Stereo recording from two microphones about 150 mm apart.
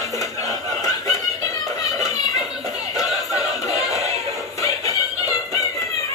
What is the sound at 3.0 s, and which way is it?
Music, 25° left (ahead or behind).